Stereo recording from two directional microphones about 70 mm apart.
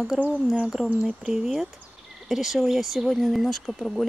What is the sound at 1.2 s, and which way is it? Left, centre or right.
Speech, centre.